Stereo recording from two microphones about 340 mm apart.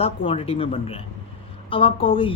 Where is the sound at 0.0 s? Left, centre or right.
Centre.